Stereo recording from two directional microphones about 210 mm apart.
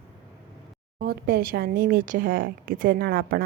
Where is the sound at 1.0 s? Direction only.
45° right (ahead or behind).